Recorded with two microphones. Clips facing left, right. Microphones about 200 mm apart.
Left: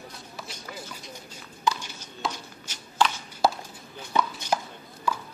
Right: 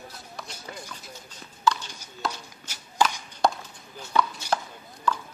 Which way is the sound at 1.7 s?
15° left (ahead or behind).